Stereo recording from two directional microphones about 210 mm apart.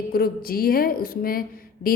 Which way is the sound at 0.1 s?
45° left (ahead or behind).